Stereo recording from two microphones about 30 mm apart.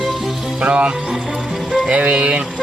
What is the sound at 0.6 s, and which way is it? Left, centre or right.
Speech, right.